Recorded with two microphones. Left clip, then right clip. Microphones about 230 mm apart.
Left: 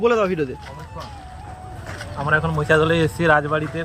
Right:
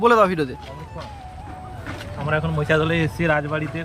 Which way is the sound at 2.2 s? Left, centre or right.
Centre.